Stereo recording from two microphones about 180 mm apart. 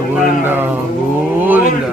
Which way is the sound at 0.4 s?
10° right (ahead or behind).